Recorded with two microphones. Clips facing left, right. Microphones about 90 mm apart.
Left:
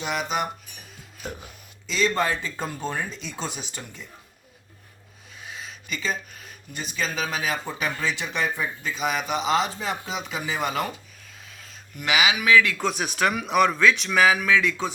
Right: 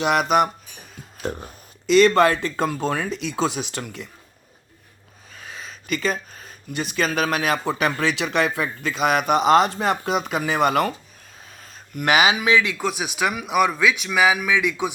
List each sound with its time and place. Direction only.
0.0 s speech: 65° right (ahead or behind)
1.3 s speech: 35° right (ahead or behind)
1.9 s speech: 65° right (ahead or behind); by 4.0 s 80° right
5.4 s a sound: 40° right (ahead or behind)
5.9 s speech: 60° right (ahead or behind)
6.3 s a sound: 40° right (ahead or behind)
6.7 s speech: 65° right (ahead or behind)
11.5 s a sound: 45° right (ahead or behind)
12.4 s speech: 20° right (ahead or behind)
12.8 s speech: 5° right (ahead or behind)